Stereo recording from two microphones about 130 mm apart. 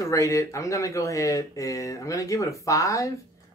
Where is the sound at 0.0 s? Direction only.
25° left (ahead or behind).